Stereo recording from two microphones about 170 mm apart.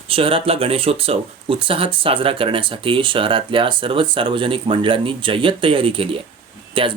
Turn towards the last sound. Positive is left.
turn(degrees=-30)  # may be behind; listen again after turning